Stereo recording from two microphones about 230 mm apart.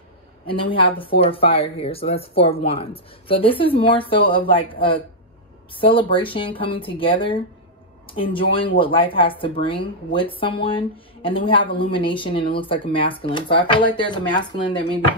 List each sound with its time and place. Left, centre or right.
0.5 s speech: left